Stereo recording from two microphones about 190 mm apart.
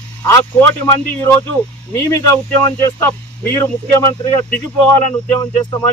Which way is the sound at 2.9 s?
15° left (ahead or behind).